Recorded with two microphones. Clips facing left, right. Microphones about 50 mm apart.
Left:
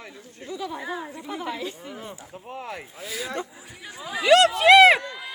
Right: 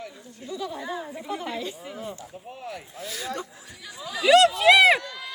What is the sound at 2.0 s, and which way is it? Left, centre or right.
Speech, left.